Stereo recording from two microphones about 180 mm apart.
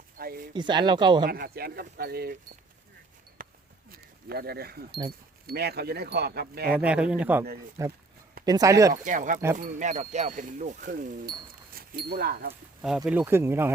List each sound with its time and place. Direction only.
0.2 s speech: 55° right (ahead or behind)
0.5 s speech: 25° right (ahead or behind)
1.3 s speech: 60° right (ahead or behind)
3.4 s basketball bounce: 50° right (ahead or behind)
3.9 s speech: 60° right (ahead or behind)
6.7 s speech: 5° right (ahead or behind)
8.9 s speech: 45° right (ahead or behind)
11.9 s speech: 60° right (ahead or behind)
13.1 s speech: 10° right (ahead or behind)